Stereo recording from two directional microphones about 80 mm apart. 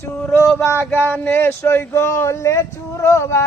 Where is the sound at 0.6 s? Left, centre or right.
Left.